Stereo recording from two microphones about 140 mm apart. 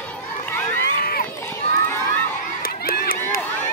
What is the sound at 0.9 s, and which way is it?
Run, 90° left.